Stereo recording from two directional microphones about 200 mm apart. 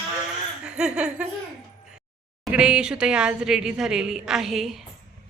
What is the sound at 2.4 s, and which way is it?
A woman's voice, 5° right (ahead or behind).